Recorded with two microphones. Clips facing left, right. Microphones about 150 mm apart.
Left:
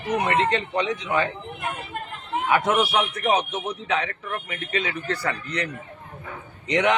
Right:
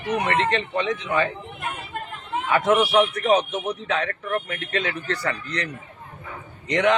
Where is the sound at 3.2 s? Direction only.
10° left (ahead or behind).